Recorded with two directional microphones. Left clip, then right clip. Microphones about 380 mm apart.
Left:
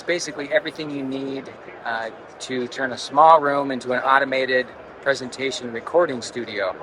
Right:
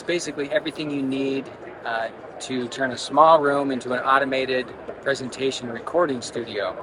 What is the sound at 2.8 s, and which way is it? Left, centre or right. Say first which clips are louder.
A man's voice: left 1 dB; centre.